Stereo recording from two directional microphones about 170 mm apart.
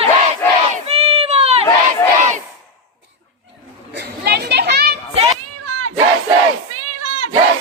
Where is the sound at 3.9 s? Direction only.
70° right (ahead or behind).